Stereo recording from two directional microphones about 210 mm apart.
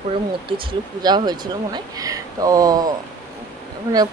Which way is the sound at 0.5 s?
20° right (ahead or behind).